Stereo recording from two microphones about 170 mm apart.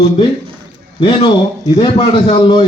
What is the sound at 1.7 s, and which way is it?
Speech, 25° left (ahead or behind).